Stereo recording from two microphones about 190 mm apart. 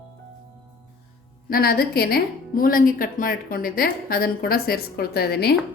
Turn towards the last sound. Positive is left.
turn(degrees=55)  # may be behind; listen again after turning